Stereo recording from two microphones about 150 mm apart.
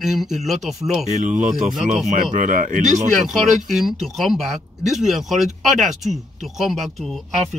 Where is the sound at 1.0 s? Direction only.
55° right (ahead or behind).